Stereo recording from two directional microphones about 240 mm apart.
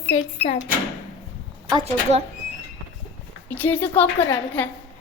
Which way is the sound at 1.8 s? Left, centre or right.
Right.